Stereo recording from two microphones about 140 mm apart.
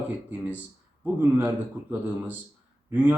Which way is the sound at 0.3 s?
10° right (ahead or behind).